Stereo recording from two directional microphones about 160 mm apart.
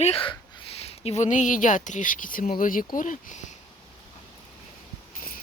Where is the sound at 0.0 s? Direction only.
35° left (ahead or behind); by 3.5 s 50° left (ahead or behind).